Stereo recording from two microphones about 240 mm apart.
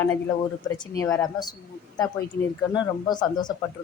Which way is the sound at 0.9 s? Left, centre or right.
Centre.